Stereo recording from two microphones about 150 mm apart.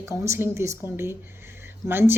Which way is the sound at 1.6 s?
15° right (ahead or behind).